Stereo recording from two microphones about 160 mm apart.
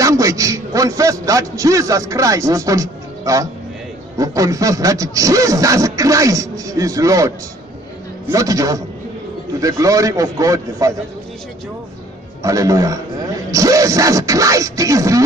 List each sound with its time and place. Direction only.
0.0 s a man's voice: 20° right (ahead or behind)
12.4 s speech: 20° right (ahead or behind)